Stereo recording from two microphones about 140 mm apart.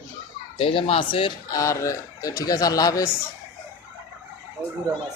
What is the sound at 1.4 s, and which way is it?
Speech, 25° left (ahead or behind).